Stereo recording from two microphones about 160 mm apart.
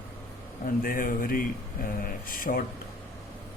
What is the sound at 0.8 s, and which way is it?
Speech, 60° left (ahead or behind).